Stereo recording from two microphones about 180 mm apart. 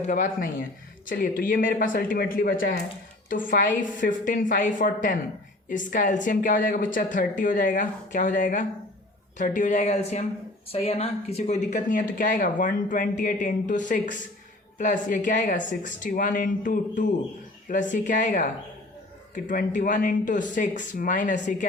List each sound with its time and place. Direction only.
0.1 s speech: 50° left (ahead or behind)